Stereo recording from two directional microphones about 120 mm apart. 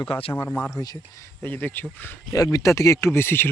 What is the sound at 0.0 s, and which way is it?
Speech, 50° left (ahead or behind).